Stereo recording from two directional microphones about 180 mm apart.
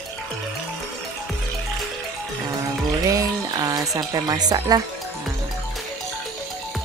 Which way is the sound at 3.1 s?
20° right (ahead or behind).